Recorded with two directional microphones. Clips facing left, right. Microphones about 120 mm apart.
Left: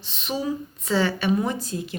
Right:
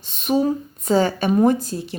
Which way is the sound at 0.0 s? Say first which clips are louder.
Right 8 dB; 50° right (ahead or behind).